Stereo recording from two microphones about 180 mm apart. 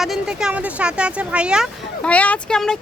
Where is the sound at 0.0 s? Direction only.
5° right (ahead or behind).